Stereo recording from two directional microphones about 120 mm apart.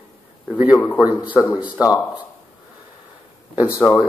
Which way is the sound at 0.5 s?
10° right (ahead or behind).